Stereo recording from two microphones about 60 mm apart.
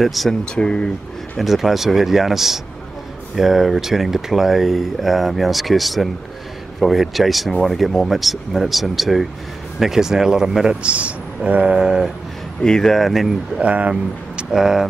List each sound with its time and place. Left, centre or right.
0.0 s speech: centre
0.3 s speech: centre
1.4 s speech: centre
12.6 s speech: centre
13.6 s speech: right
14.5 s speech: centre